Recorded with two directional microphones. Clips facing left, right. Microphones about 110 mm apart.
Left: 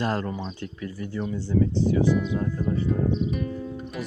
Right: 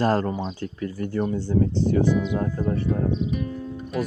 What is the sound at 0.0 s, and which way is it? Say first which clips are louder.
Speech: right 5 dB; 40° right (ahead or behind).